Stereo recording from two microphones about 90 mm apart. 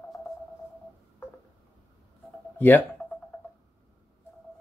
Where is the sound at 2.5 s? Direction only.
20° left (ahead or behind).